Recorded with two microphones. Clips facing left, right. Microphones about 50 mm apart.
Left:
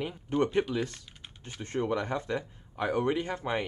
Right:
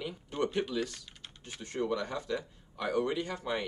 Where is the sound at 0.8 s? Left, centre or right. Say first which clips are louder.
Left 2 dB; left.